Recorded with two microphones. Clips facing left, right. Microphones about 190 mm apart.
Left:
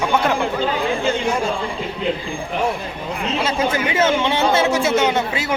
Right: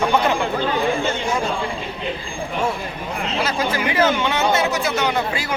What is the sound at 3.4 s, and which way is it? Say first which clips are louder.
Speech: left 1 dB; 25° left (ahead or behind).